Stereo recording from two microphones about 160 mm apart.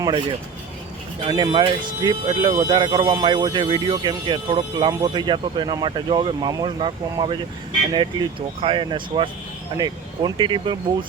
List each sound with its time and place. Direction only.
0.0 s speech: 30° right (ahead or behind)